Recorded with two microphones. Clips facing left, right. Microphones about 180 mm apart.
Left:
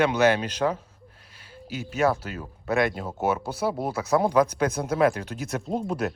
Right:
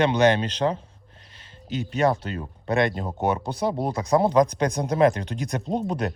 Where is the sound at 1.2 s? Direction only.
10° left (ahead or behind).